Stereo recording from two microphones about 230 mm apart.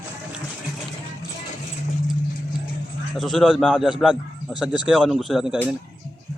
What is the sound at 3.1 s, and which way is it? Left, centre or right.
Speech, centre.